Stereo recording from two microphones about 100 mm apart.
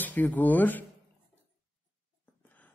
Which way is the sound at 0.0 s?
15° left (ahead or behind).